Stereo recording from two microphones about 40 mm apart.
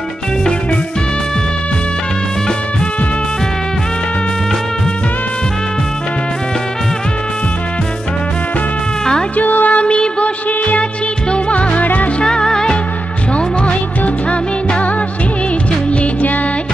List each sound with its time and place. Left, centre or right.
9.4 s music: left
9.8 s music: left
12.2 s music: left
13.3 s music: left
15.9 s music: left